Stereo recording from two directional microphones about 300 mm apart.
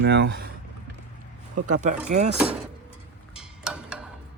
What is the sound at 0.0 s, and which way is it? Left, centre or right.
Speech, right.